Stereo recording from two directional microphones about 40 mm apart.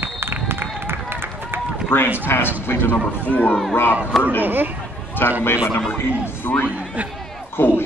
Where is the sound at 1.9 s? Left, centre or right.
Left.